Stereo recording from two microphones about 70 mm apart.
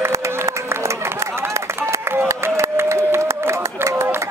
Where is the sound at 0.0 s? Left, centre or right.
Right.